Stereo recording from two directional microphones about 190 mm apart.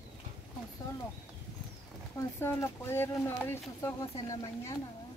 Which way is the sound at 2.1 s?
15° left (ahead or behind).